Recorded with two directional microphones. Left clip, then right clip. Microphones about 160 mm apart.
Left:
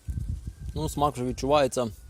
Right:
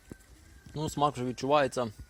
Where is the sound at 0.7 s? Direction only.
10° left (ahead or behind).